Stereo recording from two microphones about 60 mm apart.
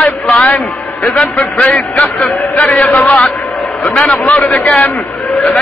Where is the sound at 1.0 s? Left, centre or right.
Centre.